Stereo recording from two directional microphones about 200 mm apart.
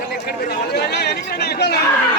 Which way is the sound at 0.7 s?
55° left (ahead or behind).